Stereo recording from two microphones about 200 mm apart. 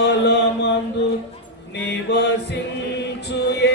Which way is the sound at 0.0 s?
60° left (ahead or behind).